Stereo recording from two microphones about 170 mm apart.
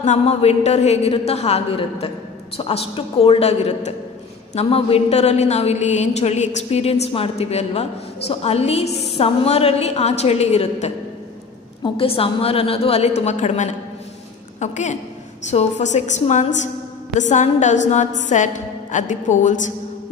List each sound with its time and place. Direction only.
0.0 s a woman's voice: 40° left (ahead or behind)